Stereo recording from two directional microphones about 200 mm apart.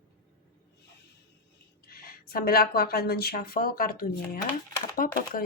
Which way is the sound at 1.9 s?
50° left (ahead or behind).